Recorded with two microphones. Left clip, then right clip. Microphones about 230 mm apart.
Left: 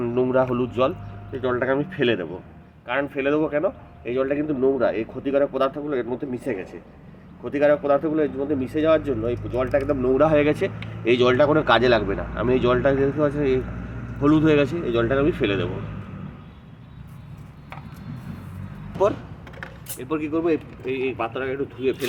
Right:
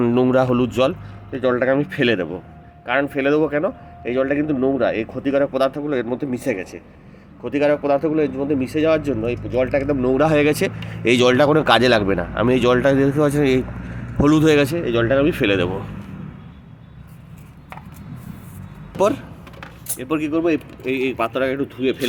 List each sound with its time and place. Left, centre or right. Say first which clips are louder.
0.0 s a man's voice: right 4 dB; right
20.0 s a man's voice: right 4 dB; right